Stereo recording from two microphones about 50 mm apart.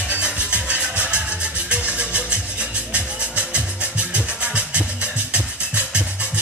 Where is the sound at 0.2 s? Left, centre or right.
Right.